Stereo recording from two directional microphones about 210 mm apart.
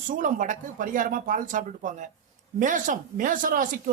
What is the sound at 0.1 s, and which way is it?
Speech, 40° right (ahead or behind).